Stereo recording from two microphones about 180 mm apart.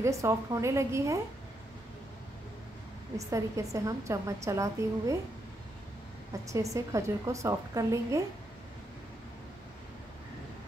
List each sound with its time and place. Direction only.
0.0 s a woman's voice: 15° right (ahead or behind)
3.2 s a woman's voice: 15° right (ahead or behind)
6.5 s a woman's voice: 20° right (ahead or behind)